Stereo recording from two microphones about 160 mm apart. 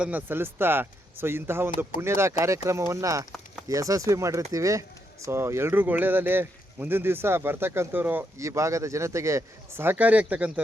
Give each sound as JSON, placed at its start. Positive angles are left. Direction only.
{"t": 0.0, "sound": "speech", "side_deg": -10}